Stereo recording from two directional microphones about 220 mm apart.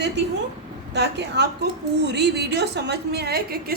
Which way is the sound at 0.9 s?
50° right (ahead or behind).